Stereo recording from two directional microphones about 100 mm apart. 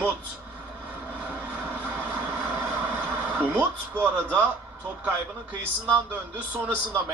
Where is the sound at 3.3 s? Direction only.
20° right (ahead or behind).